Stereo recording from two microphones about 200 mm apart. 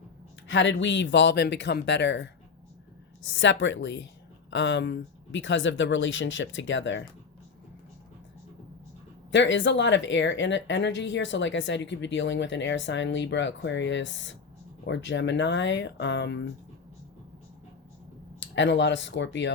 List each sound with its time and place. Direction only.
0.4 s a woman's voice: 65° left (ahead or behind)
9.3 s a woman's voice: 65° left (ahead or behind)
18.3 s a woman's voice: 65° left (ahead or behind)